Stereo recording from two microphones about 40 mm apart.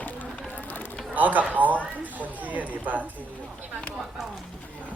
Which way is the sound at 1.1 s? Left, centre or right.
Right.